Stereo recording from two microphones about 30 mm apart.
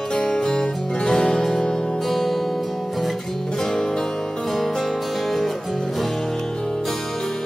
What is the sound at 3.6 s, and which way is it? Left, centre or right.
Music, centre.